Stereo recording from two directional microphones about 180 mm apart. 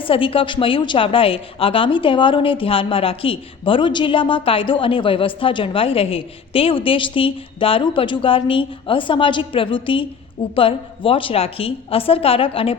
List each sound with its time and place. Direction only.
0.0 s a woman's voice: 30° left (ahead or behind)